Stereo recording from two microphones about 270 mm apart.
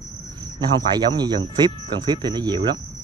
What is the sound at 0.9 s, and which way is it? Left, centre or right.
Speech, centre.